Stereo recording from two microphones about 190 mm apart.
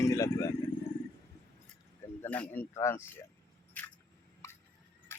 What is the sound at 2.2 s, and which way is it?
Speech, 10° left (ahead or behind).